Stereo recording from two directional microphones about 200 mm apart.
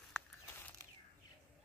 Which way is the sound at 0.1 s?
10° left (ahead or behind).